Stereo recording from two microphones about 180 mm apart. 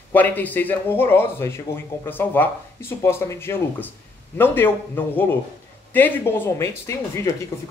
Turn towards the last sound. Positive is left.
turn(degrees=15)  # may be behind; listen again after turning